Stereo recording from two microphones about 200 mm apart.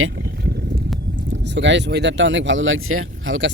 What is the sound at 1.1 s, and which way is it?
Speech, 60° right (ahead or behind).